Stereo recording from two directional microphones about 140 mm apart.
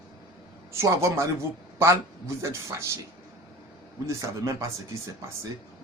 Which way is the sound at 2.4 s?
20° right (ahead or behind).